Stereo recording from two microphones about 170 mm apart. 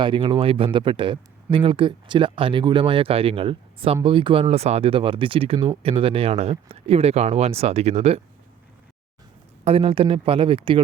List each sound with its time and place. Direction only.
0.0 s speech: 30° right (ahead or behind)
9.6 s speech: 35° right (ahead or behind)